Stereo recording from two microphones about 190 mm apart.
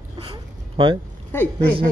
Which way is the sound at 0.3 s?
25° right (ahead or behind).